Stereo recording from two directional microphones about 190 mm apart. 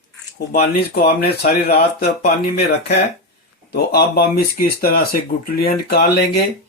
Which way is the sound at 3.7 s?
55° left (ahead or behind).